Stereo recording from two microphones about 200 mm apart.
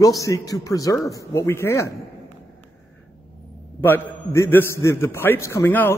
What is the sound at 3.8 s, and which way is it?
A man's voice, 10° left (ahead or behind).